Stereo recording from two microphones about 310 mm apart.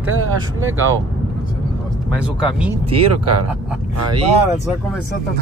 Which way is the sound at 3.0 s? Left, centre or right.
Right.